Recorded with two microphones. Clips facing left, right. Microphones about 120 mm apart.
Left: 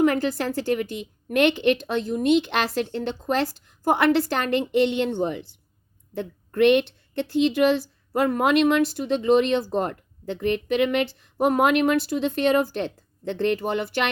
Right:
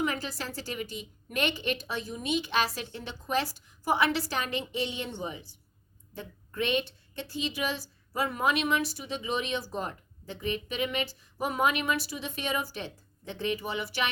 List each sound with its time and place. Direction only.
0.0 s speech: 55° left (ahead or behind)